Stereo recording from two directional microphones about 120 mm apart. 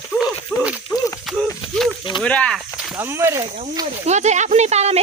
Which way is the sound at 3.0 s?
20° right (ahead or behind).